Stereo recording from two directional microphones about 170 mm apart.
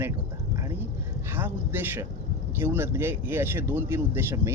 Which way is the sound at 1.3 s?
10° right (ahead or behind).